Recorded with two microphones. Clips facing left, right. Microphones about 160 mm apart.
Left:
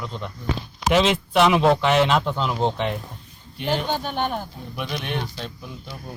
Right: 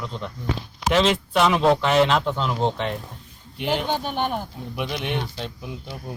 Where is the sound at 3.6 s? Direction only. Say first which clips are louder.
Even; 15° right (ahead or behind).